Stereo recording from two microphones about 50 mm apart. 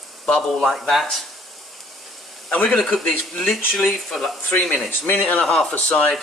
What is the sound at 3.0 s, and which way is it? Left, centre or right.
Speech, centre.